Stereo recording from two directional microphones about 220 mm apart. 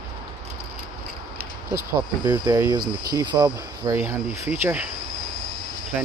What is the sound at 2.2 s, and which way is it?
Speech, 20° right (ahead or behind).